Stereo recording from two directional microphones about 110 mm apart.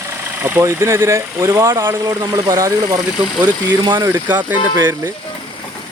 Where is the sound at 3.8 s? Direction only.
45° right (ahead or behind).